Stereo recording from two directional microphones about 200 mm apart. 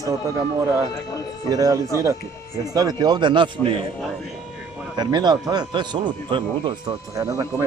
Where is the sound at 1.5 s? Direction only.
20° right (ahead or behind).